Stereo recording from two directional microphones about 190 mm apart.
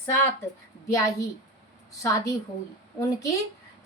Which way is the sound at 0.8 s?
15° left (ahead or behind).